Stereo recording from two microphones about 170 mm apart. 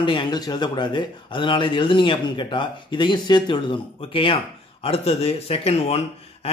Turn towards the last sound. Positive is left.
turn(degrees=35)  # may be behind; listen again after turning